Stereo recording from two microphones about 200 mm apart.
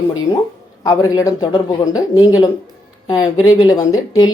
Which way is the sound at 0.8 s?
20° left (ahead or behind).